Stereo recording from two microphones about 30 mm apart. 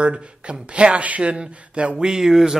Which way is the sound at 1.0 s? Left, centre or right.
Right.